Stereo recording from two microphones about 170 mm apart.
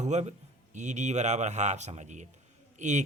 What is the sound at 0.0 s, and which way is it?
A man's voice, 40° right (ahead or behind).